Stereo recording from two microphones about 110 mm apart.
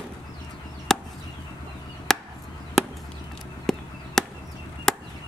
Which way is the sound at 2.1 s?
5° left (ahead or behind).